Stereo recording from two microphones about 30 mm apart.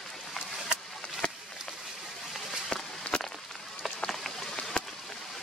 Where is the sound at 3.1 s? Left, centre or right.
Left.